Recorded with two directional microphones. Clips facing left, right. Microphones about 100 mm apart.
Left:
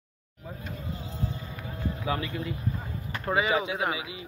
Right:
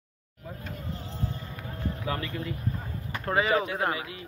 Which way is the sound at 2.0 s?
15° left (ahead or behind).